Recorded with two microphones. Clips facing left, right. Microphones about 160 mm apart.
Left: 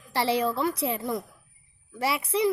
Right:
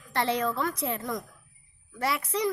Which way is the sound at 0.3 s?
30° left (ahead or behind).